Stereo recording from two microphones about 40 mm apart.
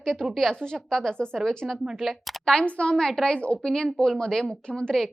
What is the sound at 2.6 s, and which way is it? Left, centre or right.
Speech, left.